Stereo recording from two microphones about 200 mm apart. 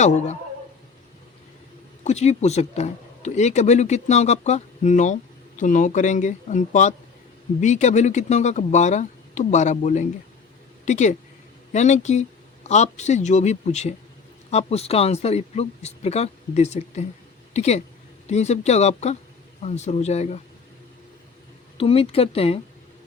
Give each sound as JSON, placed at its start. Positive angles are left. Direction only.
{"t": 0.0, "sound": "speech", "side_deg": 35}
{"t": 2.0, "sound": "speech", "side_deg": 35}
{"t": 21.8, "sound": "speech", "side_deg": 30}